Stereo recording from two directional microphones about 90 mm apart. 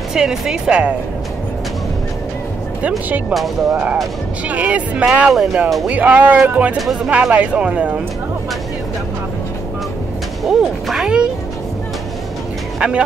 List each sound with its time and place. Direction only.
0.1 s speech: 5° right (ahead or behind)
3.7 s speech: 15° right (ahead or behind)
5.3 s speech: centre (ahead or behind)
5.9 s speech: 15° right (ahead or behind)
10.4 s speech: centre (ahead or behind)
12.7 s vehicle: 5° right (ahead or behind)